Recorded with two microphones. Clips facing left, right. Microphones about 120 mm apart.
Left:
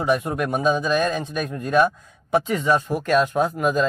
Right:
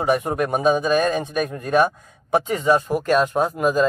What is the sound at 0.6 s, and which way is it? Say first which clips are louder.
Speech: right 3 dB; 50° right (ahead or behind).